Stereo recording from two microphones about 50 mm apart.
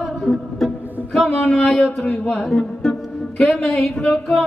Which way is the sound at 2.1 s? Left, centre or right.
Left.